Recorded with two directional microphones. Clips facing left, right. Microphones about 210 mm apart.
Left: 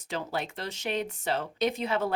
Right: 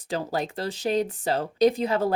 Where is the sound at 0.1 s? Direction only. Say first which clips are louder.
Right 5 dB; 40° right (ahead or behind).